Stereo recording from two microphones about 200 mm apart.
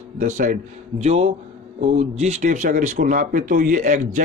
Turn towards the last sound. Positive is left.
turn(degrees=-40)  # may be behind; listen again after turning